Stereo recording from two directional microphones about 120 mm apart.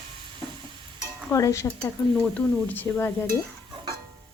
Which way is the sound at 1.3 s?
25° left (ahead or behind).